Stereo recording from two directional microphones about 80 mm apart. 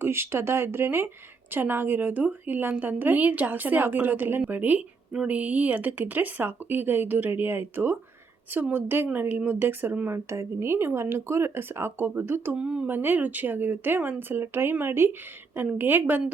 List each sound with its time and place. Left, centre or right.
0.0 s a woman's voice: right
5.1 s speech: centre
5.4 s a woman's voice: centre
12.5 s speech: centre
12.9 s a woman's voice: right